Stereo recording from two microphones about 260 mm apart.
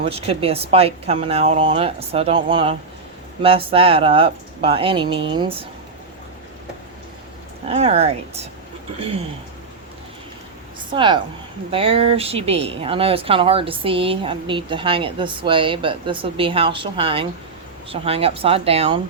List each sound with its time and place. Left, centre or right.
0.0 s speech: right
7.7 s speech: right
10.9 s a woman's voice: centre